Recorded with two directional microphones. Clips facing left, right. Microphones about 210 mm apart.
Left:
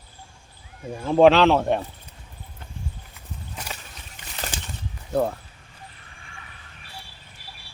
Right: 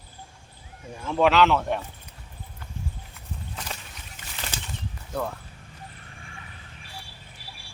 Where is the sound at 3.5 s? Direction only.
10° left (ahead or behind).